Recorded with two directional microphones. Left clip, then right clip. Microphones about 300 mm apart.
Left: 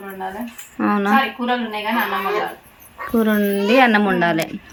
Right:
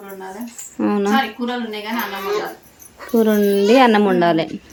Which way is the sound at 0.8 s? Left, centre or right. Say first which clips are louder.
Even; centre.